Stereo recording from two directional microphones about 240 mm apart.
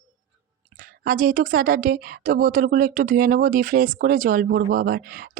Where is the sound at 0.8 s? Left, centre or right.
Right.